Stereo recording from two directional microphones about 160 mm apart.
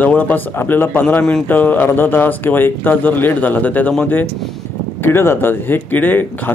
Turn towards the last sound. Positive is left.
turn(degrees=10)  # may be behind; listen again after turning